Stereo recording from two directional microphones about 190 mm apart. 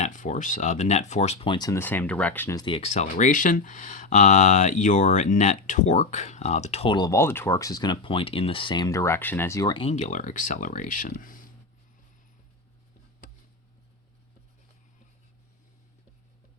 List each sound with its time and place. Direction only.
0.0 s speech: 40° left (ahead or behind); by 2.6 s 10° left (ahead or behind)
2.6 s speech: 25° left (ahead or behind); by 11.3 s 45° left (ahead or behind)